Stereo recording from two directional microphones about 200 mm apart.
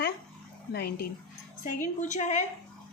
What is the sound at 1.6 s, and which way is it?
Speech, 40° left (ahead or behind).